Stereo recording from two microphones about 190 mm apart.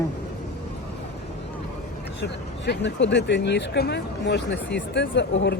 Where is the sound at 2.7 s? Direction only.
65° left (ahead or behind).